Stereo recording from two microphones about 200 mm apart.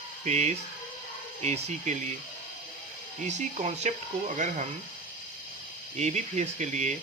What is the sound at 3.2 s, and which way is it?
Speech, 35° right (ahead or behind).